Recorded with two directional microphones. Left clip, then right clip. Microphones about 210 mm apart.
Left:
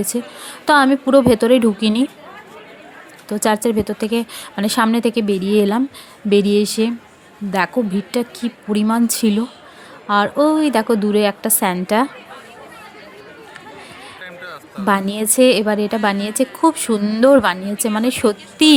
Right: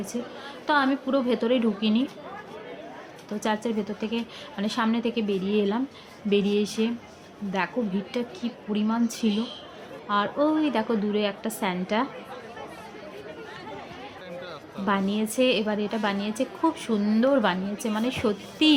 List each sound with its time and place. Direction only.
0.0 s a woman's voice: 55° left (ahead or behind)
3.2 s a woman's voice: 55° left (ahead or behind)
8.1 s a woman's voice: 50° left (ahead or behind)
14.3 s music: centre (ahead or behind)
14.8 s a woman's voice: 55° left (ahead or behind)